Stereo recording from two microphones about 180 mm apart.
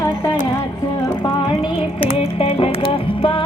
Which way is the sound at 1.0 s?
25° left (ahead or behind).